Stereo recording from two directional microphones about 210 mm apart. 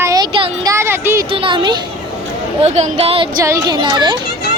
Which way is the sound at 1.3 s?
25° right (ahead or behind).